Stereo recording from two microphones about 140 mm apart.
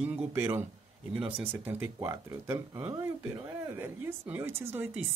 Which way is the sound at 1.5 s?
15° right (ahead or behind).